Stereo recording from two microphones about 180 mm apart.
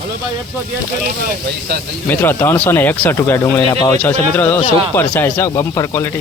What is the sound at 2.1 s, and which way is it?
Speech, 10° left (ahead or behind).